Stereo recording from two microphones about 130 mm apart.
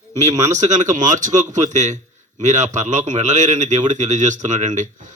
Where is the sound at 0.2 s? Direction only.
65° right (ahead or behind).